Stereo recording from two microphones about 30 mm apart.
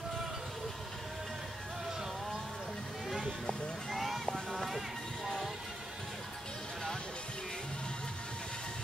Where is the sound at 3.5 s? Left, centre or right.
Left.